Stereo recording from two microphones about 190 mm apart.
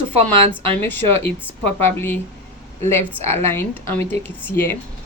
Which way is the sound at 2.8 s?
10° left (ahead or behind).